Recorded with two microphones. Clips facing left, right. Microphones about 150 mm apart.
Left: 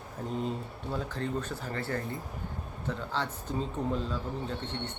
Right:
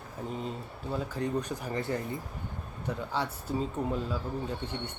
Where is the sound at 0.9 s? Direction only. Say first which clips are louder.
Right 2 dB; 10° right (ahead or behind).